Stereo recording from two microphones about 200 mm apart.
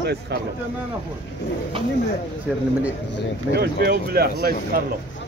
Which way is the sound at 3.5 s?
55° right (ahead or behind).